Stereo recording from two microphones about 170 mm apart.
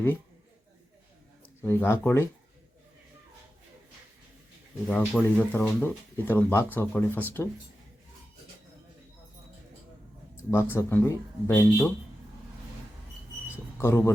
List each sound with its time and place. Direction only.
1.6 s speech: 10° left (ahead or behind)
4.9 s speech: 10° left (ahead or behind)
10.3 s speech: 15° left (ahead or behind)
13.7 s speech: 15° left (ahead or behind)